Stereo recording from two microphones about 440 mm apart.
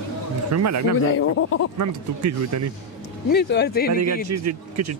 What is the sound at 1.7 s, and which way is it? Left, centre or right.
Speech, right.